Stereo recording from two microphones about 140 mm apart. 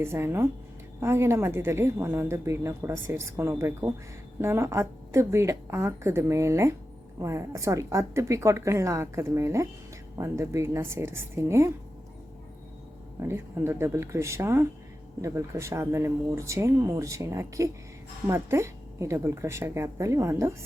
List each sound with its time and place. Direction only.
0.0 s a woman's voice: 20° right (ahead or behind)
13.2 s a woman's voice: 20° right (ahead or behind)